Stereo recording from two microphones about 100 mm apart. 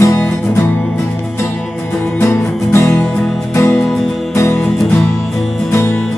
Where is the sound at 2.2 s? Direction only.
25° left (ahead or behind).